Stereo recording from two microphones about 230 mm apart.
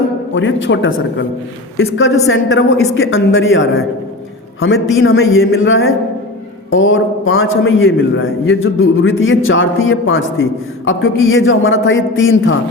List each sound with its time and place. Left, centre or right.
0.3 s a man's voice: left
4.9 s a man's voice: left